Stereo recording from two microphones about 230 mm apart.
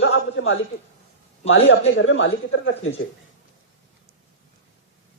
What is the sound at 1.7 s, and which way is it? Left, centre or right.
Speech, left.